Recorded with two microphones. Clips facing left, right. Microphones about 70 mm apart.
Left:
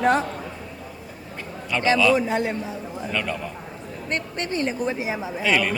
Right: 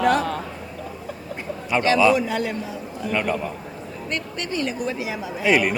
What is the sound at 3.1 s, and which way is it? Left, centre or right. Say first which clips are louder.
Speech: right 4 dB; centre.